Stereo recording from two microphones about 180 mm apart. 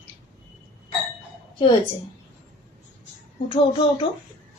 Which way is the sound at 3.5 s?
30° left (ahead or behind).